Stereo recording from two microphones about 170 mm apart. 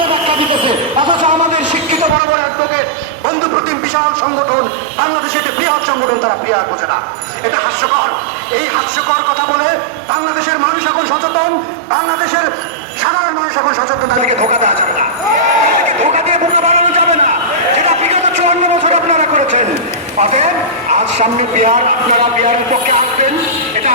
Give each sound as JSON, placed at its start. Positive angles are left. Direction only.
{"t": 0.0, "sound": "vehicle", "side_deg": -30}
{"t": 14.2, "sound": "a man's voice", "side_deg": -45}
{"t": 16.0, "sound": "a sound", "side_deg": -45}
{"t": 20.1, "sound": "a man's voice", "side_deg": -45}